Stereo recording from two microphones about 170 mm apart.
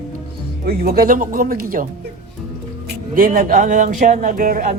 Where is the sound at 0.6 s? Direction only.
65° right (ahead or behind).